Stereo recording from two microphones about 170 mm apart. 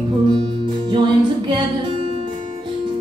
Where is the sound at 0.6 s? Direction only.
25° right (ahead or behind).